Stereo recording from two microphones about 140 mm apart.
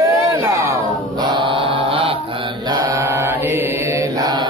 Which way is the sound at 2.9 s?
20° right (ahead or behind).